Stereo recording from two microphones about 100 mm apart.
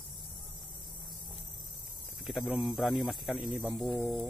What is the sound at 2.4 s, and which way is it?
Speech, 15° right (ahead or behind).